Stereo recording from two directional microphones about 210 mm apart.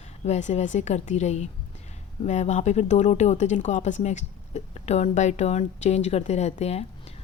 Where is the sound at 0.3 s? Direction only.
35° left (ahead or behind).